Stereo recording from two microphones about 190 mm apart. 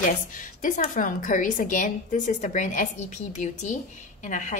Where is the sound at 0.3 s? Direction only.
45° left (ahead or behind).